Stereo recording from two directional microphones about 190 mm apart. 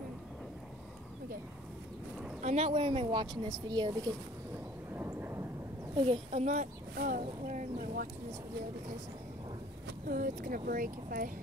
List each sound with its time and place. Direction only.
2.4 s speech: 35° right (ahead or behind)
4.9 s vehicle: 10° right (ahead or behind)
5.9 s a child's voice: 35° right (ahead or behind)
7.2 s a sound: 40° right (ahead or behind)
10.0 s speech: 50° right (ahead or behind)